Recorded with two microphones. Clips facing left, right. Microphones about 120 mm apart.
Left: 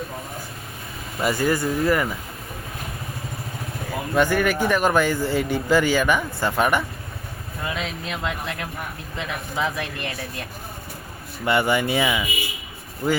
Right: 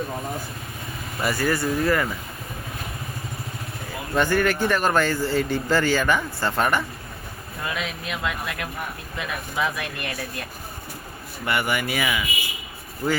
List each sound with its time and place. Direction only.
1.2 s speech: 20° left (ahead or behind)
4.1 s speech: 5° left (ahead or behind)
7.7 s speech: 30° left (ahead or behind)
11.4 s speech: 25° left (ahead or behind)